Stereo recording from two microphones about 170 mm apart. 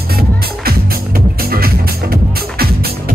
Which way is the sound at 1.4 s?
60° right (ahead or behind).